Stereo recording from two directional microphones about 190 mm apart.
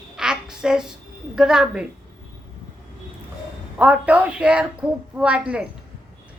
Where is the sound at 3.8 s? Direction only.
5° right (ahead or behind).